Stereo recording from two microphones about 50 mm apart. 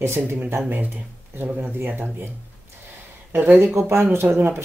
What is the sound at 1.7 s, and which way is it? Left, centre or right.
Speech, right.